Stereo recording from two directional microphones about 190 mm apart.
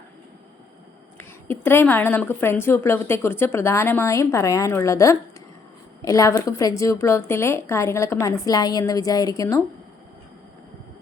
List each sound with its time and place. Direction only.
1.2 s a woman's voice: 10° left (ahead or behind)